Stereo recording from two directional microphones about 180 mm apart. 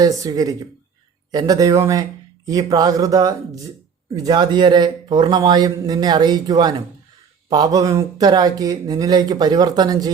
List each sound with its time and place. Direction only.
0.0 s speech: 20° right (ahead or behind)